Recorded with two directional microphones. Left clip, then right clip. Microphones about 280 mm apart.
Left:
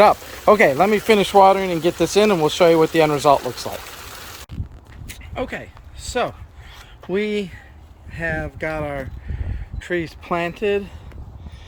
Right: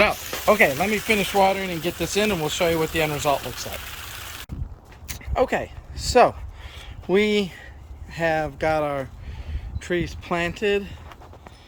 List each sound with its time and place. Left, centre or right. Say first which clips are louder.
0.5 s speech: left 5 dB; centre
5.3 s speech: right 6 dB; centre
7.1 s speech: right 2 dB; centre